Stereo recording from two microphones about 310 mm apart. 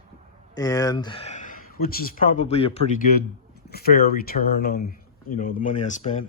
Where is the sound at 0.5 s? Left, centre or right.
Centre.